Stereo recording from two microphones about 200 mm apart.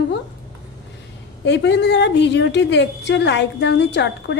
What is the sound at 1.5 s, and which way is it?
A woman's voice, 60° left (ahead or behind).